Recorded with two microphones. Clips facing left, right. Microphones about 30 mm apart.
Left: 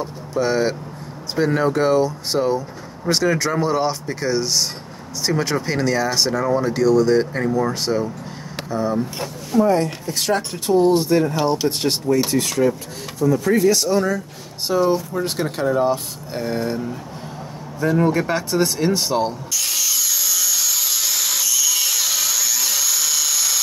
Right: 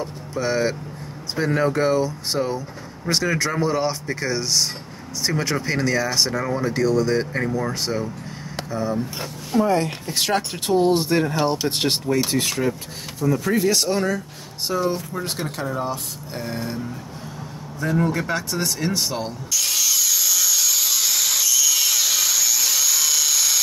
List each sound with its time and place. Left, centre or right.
0.0 s vehicle: centre
1.3 s speech: centre
6.8 s speech: centre
9.5 s speech: centre
10.3 s speech: right
13.2 s speech: centre
13.7 s speech: right
14.9 s a man's voice: centre
19.5 s wood: centre